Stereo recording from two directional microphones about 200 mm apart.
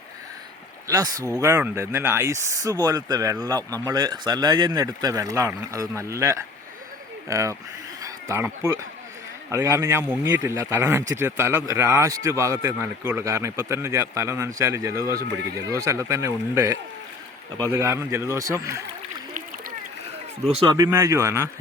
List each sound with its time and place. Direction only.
0.9 s speech: 15° right (ahead or behind)
8.0 s a sound: 15° right (ahead or behind)
9.5 s speech: 15° right (ahead or behind)
20.5 s speech: 20° right (ahead or behind)